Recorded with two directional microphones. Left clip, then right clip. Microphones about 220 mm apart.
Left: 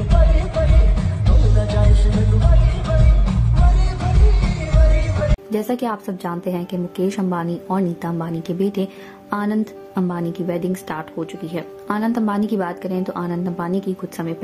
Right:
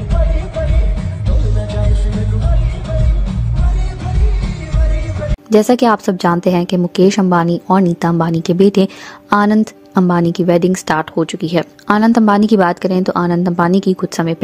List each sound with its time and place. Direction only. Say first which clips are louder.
0.2 s music: right 2 dB; centre (ahead or behind)
0.9 s music: even; 15° left (ahead or behind)
5.5 s a woman's voice: right 17 dB; 40° right (ahead or behind)